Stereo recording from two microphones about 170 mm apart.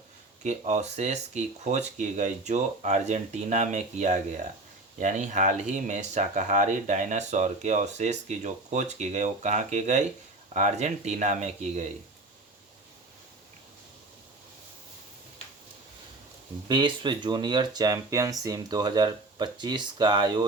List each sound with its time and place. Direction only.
0.4 s speech: 40° right (ahead or behind)
16.6 s speech: 25° right (ahead or behind)